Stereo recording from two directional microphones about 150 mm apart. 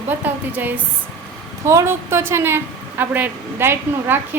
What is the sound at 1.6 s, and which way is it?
A woman's voice, 20° right (ahead or behind).